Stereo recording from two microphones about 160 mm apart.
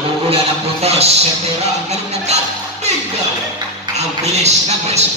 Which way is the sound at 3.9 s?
45° right (ahead or behind).